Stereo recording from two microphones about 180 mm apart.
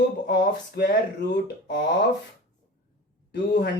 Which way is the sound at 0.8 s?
65° left (ahead or behind).